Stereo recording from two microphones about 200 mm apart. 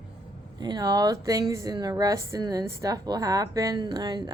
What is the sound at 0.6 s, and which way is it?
A woman's voice, 20° right (ahead or behind).